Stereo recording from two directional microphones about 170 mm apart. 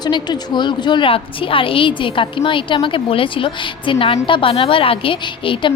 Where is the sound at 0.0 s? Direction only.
25° left (ahead or behind).